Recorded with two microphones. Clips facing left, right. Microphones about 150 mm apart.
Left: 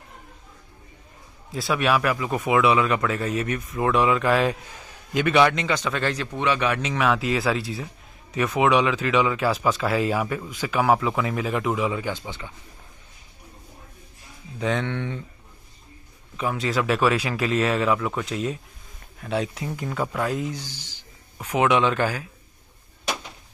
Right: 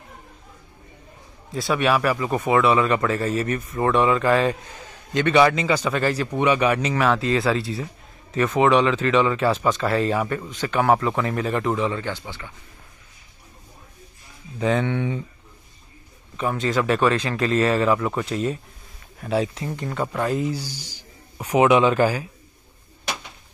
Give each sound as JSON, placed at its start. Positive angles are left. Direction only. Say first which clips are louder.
{"t": 1.5, "sound": "a man's voice", "louder": "right 2 dB", "side_deg": 0}
{"t": 14.6, "sound": "speech", "louder": "right 4 dB", "side_deg": -5}
{"t": 16.3, "sound": "a man's voice", "louder": "right 2 dB", "side_deg": 0}